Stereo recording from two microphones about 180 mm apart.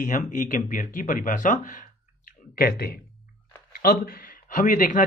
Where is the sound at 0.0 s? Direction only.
45° left (ahead or behind).